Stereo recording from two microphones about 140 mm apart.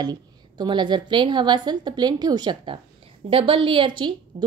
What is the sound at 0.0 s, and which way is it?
A woman's voice, 30° right (ahead or behind).